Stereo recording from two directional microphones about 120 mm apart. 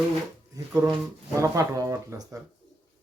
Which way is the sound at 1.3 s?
25° right (ahead or behind).